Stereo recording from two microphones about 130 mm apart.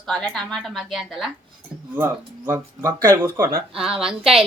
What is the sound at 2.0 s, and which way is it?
Speech, 15° right (ahead or behind).